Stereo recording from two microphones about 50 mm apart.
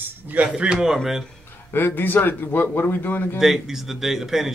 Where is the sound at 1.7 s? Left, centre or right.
Left.